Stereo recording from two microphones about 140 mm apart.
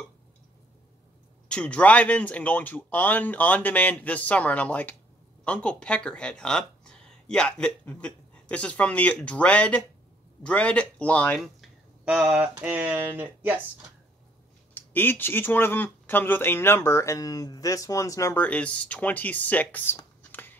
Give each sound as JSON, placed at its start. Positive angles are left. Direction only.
{"t": 1.5, "sound": "speech", "side_deg": 10}
{"t": 12.0, "sound": "speech", "side_deg": -10}
{"t": 14.7, "sound": "speech", "side_deg": 15}
{"t": 18.4, "sound": "speech", "side_deg": 10}
{"t": 20.2, "sound": "a sound", "side_deg": 15}